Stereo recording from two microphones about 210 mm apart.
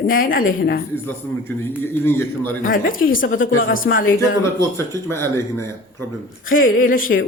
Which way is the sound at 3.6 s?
70° left (ahead or behind).